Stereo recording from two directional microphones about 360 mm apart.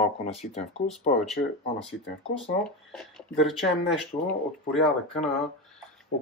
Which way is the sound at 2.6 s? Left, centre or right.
Centre.